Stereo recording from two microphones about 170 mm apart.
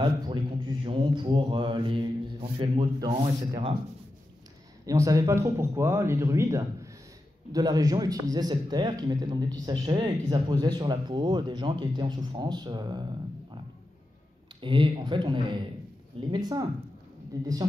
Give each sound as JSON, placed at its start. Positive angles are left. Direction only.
{"t": 0.0, "sound": "mantra", "side_deg": -25}
{"t": 3.1, "sound": "speech", "side_deg": -30}
{"t": 4.8, "sound": "a man's voice", "side_deg": -20}
{"t": 14.6, "sound": "a man's voice", "side_deg": -30}